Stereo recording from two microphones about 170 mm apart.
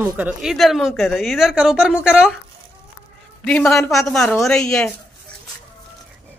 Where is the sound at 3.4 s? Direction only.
5° left (ahead or behind).